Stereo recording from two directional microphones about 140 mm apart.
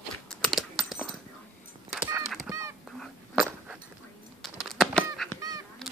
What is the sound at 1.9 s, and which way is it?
Honk, 10° right (ahead or behind).